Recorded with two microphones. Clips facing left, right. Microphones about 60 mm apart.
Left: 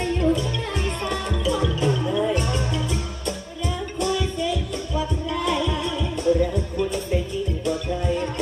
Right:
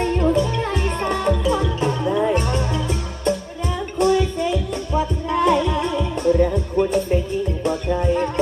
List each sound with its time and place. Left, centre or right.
0.0 s music: right
4.0 s music: right